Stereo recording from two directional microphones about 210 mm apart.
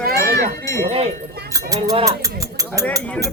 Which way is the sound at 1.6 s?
15° right (ahead or behind).